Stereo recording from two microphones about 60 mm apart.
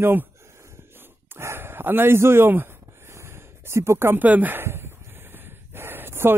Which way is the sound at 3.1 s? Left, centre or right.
Right.